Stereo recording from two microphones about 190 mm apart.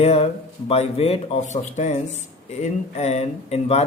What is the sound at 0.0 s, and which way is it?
Speech, 35° left (ahead or behind).